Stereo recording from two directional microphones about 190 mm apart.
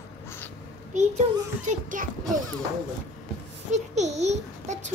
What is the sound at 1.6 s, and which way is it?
Speech, 45° right (ahead or behind).